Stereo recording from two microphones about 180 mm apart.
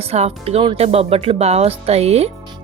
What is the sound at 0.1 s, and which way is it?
Speech, 35° right (ahead or behind).